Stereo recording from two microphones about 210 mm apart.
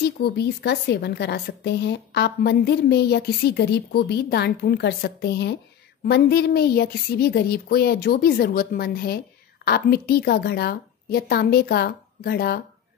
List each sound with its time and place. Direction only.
0.0 s a woman's voice: 50° left (ahead or behind)